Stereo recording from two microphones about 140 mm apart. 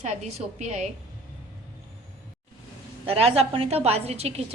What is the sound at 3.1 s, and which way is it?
A woman's voice, 45° right (ahead or behind).